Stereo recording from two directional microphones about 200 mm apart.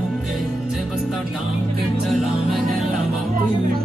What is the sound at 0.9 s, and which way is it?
Music, centre (ahead or behind).